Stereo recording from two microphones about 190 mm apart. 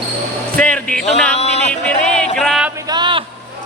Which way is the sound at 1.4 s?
35° left (ahead or behind).